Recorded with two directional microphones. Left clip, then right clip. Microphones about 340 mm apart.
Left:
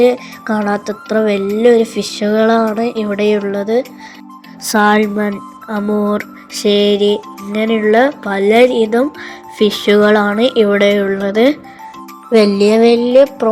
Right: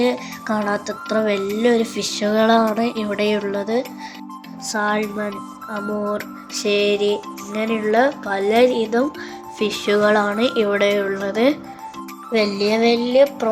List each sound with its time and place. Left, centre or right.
0.0 s speech: centre
4.6 s music: centre